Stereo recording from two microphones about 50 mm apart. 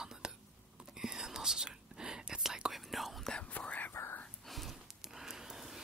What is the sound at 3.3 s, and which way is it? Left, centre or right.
Whispering, left.